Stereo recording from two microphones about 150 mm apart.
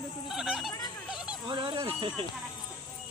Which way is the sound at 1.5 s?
30° right (ahead or behind).